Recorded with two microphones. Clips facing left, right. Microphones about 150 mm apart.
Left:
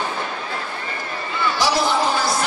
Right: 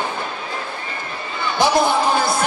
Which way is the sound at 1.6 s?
55° right (ahead or behind).